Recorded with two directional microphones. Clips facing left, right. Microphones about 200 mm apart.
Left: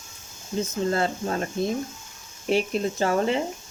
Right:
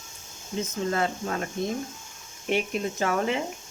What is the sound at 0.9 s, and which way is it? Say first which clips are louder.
Speech: left 1 dB; 35° left (ahead or behind).